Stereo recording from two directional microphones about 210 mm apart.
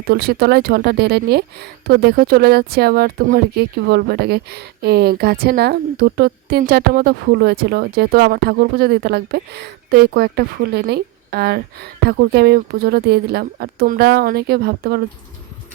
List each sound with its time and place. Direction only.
0.1 s speech: 50° right (ahead or behind)